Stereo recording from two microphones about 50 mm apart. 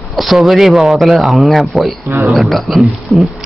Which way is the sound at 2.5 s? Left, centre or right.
Centre.